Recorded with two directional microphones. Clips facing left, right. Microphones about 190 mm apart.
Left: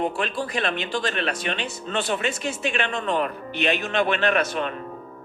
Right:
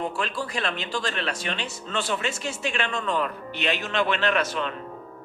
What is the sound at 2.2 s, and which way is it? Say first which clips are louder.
Speech: left 3 dB; 20° left (ahead or behind).